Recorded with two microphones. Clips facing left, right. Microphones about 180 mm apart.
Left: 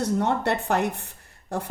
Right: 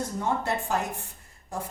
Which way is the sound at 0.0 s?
70° left (ahead or behind).